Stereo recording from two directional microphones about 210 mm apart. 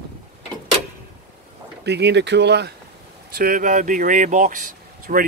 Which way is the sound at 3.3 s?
45° right (ahead or behind).